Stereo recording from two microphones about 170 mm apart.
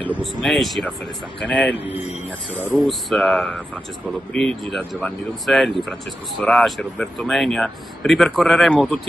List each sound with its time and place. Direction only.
0.1 s a man's voice: centre (ahead or behind)
1.9 s a man's voice: 35° left (ahead or behind)
2.5 s speech: centre (ahead or behind)